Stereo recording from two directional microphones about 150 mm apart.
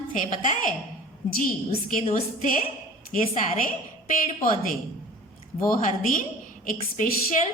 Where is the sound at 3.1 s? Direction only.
65° left (ahead or behind).